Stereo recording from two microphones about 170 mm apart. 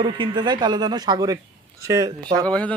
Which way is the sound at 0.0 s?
25° right (ahead or behind).